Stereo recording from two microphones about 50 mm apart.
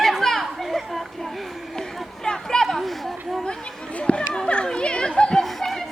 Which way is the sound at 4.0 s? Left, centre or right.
Centre.